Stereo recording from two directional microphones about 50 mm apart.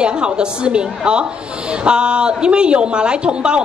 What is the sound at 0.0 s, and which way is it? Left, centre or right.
A woman's voice, centre.